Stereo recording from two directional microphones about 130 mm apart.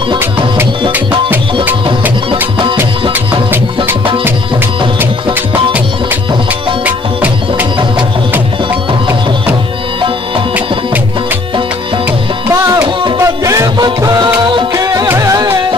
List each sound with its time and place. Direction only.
13.2 s music: 25° right (ahead or behind)